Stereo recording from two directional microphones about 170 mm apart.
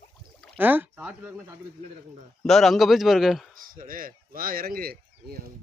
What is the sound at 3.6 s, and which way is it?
Speech, 55° right (ahead or behind).